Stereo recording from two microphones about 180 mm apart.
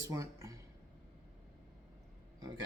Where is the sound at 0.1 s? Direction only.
15° right (ahead or behind).